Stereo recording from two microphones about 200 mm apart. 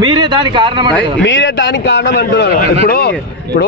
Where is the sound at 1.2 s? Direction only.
65° left (ahead or behind).